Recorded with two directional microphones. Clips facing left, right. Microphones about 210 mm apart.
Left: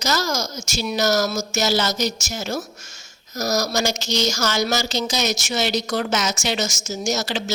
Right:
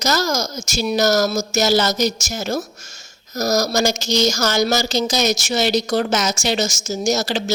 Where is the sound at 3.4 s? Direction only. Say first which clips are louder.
Right 4 dB; 45° right (ahead or behind).